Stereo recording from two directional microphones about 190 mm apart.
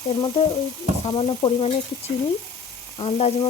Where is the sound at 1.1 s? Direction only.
25° left (ahead or behind).